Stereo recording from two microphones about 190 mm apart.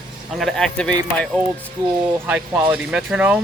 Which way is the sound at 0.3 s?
Centre (ahead or behind).